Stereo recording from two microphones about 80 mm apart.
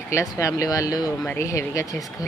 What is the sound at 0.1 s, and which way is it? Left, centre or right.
Speech, left.